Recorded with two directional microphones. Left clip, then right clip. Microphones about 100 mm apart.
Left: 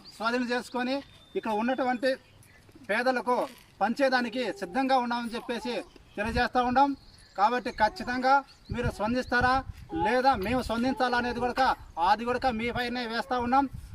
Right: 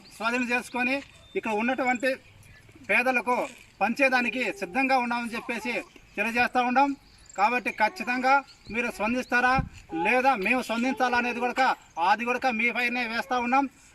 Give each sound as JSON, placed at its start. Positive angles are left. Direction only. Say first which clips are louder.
{"t": 0.3, "sound": "speech", "louder": "right 2 dB", "side_deg": 15}